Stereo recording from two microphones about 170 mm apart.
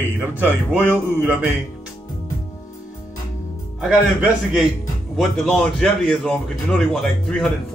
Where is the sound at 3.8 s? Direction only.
5° right (ahead or behind).